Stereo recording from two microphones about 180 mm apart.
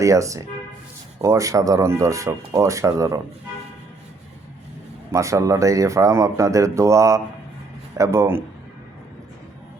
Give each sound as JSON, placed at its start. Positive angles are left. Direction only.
{"t": 0.0, "sound": "speech", "side_deg": -15}
{"t": 5.1, "sound": "speech", "side_deg": -15}